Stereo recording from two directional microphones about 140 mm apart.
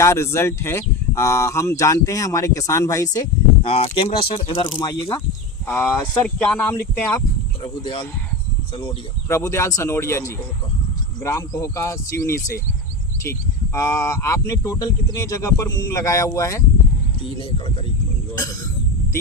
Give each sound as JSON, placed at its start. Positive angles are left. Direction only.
{"t": 0.0, "sound": "speech", "side_deg": 20}
{"t": 3.6, "sound": "speech", "side_deg": 45}
{"t": 5.6, "sound": "speech", "side_deg": 10}
{"t": 7.6, "sound": "speech", "side_deg": 40}
{"t": 9.3, "sound": "speech", "side_deg": 20}
{"t": 13.7, "sound": "speech", "side_deg": 20}